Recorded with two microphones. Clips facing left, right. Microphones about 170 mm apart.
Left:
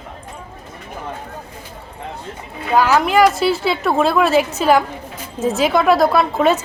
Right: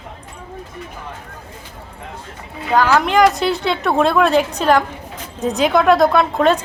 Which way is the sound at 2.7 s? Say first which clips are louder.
Even; 5° left (ahead or behind).